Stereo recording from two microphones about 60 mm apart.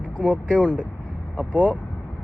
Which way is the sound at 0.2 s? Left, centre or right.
Centre.